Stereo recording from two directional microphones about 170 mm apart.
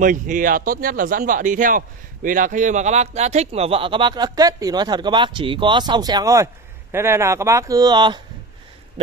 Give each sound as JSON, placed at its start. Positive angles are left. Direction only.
{"t": 0.0, "sound": "speech", "side_deg": -50}